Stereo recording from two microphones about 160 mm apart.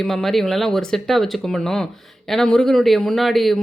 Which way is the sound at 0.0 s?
Centre (ahead or behind).